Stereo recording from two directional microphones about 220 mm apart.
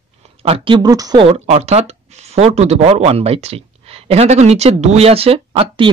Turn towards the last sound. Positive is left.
turn(degrees=-25)  # may be behind; listen again after turning